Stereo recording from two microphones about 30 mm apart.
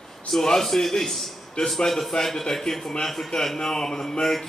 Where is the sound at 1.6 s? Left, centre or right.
Left.